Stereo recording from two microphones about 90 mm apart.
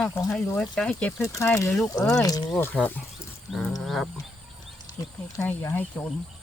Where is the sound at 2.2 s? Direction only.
45° left (ahead or behind).